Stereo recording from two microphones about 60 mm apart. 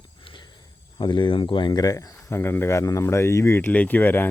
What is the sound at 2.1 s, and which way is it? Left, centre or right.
Speech, left.